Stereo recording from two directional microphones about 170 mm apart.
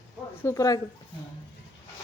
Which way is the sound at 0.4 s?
20° left (ahead or behind).